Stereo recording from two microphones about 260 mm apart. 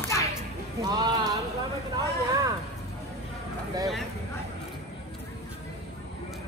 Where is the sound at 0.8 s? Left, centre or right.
Centre.